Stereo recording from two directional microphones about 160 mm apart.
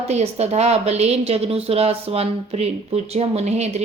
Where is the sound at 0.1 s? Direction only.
40° right (ahead or behind).